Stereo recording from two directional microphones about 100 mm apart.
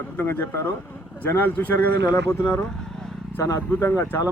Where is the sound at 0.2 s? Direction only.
20° left (ahead or behind).